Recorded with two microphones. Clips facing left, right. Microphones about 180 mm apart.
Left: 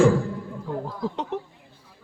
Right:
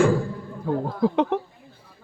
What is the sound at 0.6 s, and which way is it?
Speech, 60° right (ahead or behind).